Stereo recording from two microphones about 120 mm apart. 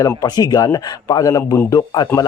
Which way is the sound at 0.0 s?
30° left (ahead or behind).